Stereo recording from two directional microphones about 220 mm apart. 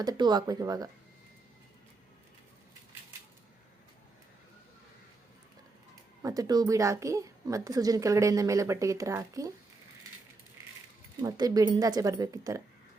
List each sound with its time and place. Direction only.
0.0 s a child's voice: 20° right (ahead or behind)
6.2 s a child's voice: 15° right (ahead or behind)
11.2 s a child's voice: 15° right (ahead or behind)